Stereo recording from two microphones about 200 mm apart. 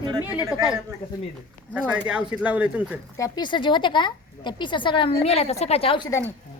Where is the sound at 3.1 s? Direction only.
20° left (ahead or behind).